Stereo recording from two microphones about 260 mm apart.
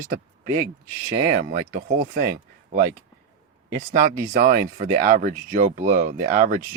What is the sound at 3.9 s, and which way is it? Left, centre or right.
Speech, right.